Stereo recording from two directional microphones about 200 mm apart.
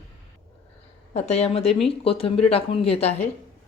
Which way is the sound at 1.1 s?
30° left (ahead or behind).